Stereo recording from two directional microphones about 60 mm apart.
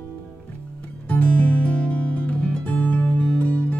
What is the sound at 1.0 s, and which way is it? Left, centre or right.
Music, left.